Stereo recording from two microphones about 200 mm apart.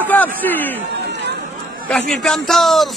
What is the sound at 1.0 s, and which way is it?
Chatter, 60° right (ahead or behind).